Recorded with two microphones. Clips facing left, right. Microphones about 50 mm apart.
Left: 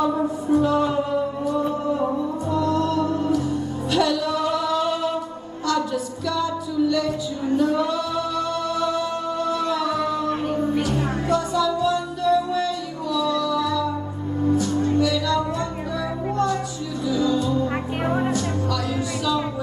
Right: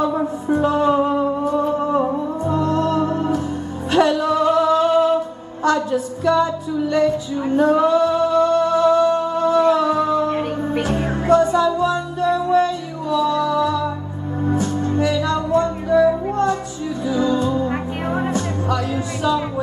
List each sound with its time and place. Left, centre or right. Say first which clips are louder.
0.1 s music: right 1 dB; right
5.6 s a sound: right 5 dB; right
10.4 s music: right 1 dB; right